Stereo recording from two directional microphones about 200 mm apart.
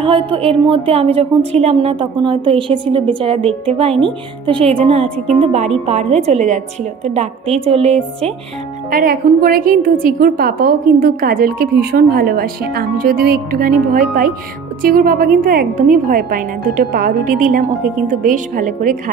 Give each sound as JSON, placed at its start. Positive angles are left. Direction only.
{"t": 0.0, "sound": "a woman's voice", "side_deg": -25}
{"t": 8.9, "sound": "a woman's voice", "side_deg": -45}